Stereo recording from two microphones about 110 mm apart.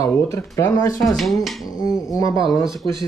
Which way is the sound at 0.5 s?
30° left (ahead or behind).